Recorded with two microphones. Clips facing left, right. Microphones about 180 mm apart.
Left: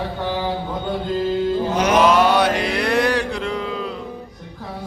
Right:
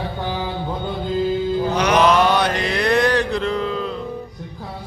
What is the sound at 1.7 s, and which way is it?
Mantra, 50° left (ahead or behind).